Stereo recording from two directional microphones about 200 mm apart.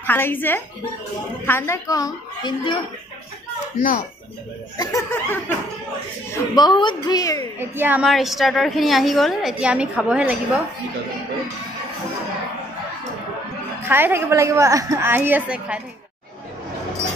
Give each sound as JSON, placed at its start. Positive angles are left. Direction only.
{"t": 0.0, "sound": "a woman's voice", "side_deg": 10}
{"t": 4.7, "sound": "a woman's voice", "side_deg": 15}
{"t": 7.5, "sound": "a woman's voice", "side_deg": -10}
{"t": 13.8, "sound": "a woman's voice", "side_deg": -10}